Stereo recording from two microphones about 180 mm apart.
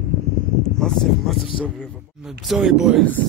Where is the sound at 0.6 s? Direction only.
5° left (ahead or behind).